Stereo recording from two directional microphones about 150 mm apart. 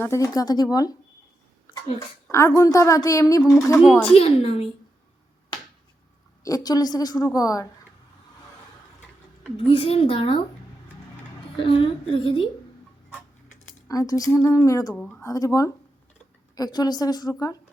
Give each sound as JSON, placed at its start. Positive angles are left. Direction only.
{"t": 0.0, "sound": "a woman's voice", "side_deg": 20}
{"t": 2.3, "sound": "a woman's voice", "side_deg": 20}
{"t": 4.1, "sound": "a woman's voice", "side_deg": 40}
{"t": 6.4, "sound": "a woman's voice", "side_deg": 25}
{"t": 9.6, "sound": "a woman's voice", "side_deg": 40}
{"t": 11.5, "sound": "a woman's voice", "side_deg": 35}
{"t": 13.8, "sound": "a woman's voice", "side_deg": 20}
{"t": 14.9, "sound": "a woman's voice", "side_deg": 5}
{"t": 15.2, "sound": "a woman's voice", "side_deg": 20}